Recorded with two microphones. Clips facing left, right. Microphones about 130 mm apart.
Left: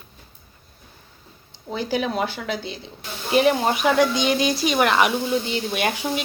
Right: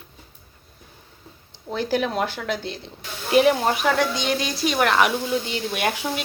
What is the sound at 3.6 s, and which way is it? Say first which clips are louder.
Speech: left 2 dB; 10° left (ahead or behind).